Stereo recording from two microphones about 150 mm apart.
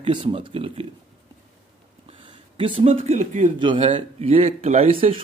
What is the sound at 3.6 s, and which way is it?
A man's voice, 35° right (ahead or behind).